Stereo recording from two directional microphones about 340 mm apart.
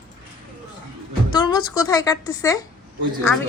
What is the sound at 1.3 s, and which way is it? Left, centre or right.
Speech, centre.